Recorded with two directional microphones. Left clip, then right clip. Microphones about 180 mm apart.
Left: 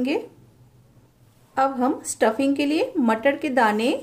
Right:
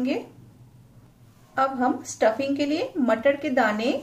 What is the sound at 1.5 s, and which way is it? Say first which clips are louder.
A woman's voice: left 2 dB; 60° left (ahead or behind).